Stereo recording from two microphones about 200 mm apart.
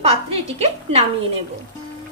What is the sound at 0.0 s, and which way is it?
A woman's voice, 30° right (ahead or behind).